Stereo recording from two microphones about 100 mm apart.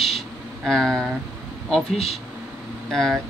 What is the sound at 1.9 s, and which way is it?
Speech, 80° left.